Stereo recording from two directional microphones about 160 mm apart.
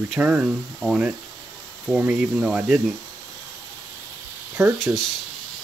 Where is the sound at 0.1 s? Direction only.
5° right (ahead or behind).